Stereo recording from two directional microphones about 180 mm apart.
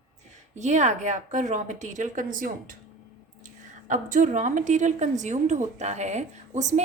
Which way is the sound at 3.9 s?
45° right (ahead or behind).